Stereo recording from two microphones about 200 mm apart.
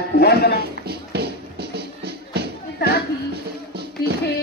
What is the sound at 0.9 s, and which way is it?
Music, 55° right (ahead or behind).